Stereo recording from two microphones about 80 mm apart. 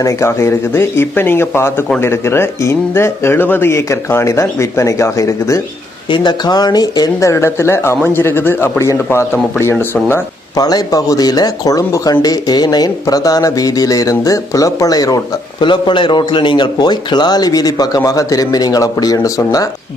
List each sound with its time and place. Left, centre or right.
0.0 s speech: left
6.1 s a man's voice: left
7.3 s speech: left
10.6 s speech: left
12.2 s speech: left
15.6 s a man's voice: left